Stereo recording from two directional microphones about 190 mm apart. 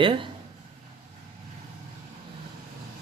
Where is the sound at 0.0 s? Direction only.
25° right (ahead or behind).